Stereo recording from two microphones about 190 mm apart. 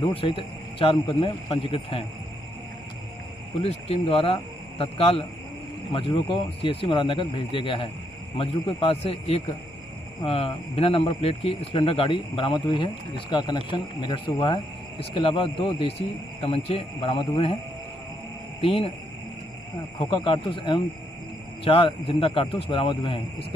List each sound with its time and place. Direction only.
0.0 s speech: 25° left (ahead or behind)
3.6 s speech: 35° left (ahead or behind)
18.6 s speech: 30° left (ahead or behind)
20.0 s speech: 25° left (ahead or behind)